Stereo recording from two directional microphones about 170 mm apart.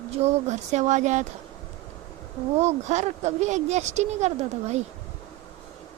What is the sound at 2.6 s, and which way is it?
Speech, 40° right (ahead or behind).